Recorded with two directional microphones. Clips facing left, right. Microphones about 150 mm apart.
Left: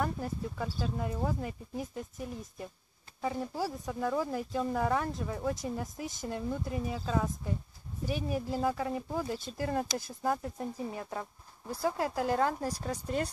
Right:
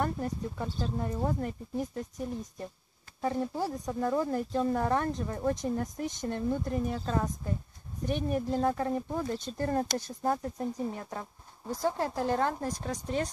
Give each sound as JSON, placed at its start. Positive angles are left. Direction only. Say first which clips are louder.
{"t": 0.0, "sound": "speech", "louder": "right 2 dB", "side_deg": 5}
{"t": 10.2, "sound": "speech", "louder": "right 2 dB", "side_deg": -30}
{"t": 10.7, "sound": "speech", "louder": "right 2 dB", "side_deg": 10}